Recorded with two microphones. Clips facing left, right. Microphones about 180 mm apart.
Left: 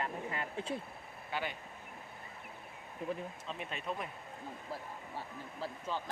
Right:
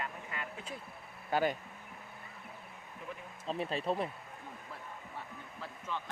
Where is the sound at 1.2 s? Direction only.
45° right (ahead or behind).